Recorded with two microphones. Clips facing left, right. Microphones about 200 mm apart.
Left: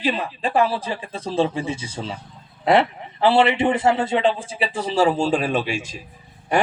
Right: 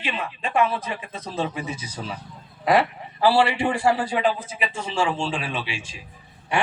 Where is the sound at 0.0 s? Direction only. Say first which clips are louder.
Left 6 dB; 35° left (ahead or behind).